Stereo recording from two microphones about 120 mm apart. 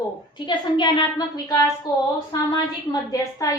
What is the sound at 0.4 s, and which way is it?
Speech, 40° left (ahead or behind).